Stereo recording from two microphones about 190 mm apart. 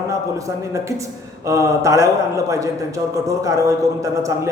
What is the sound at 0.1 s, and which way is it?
A man's voice, 15° right (ahead or behind).